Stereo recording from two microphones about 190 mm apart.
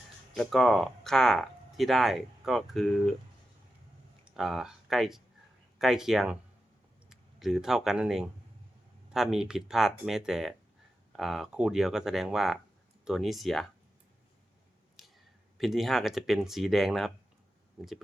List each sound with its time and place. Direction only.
0.3 s speech: centre (ahead or behind)
4.4 s speech: centre (ahead or behind)
15.5 s speech: centre (ahead or behind)